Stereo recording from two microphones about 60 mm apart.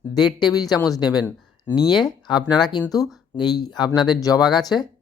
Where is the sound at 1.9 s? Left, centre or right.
Centre.